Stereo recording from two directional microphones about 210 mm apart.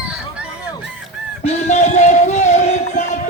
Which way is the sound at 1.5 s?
35° left (ahead or behind).